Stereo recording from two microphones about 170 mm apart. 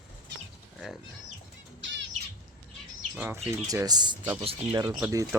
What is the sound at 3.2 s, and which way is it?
Speech, 15° right (ahead or behind).